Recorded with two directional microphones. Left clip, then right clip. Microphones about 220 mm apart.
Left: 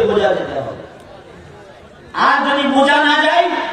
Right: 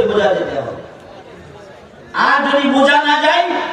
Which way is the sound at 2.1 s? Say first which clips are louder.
Right 1 dB; 20° right (ahead or behind).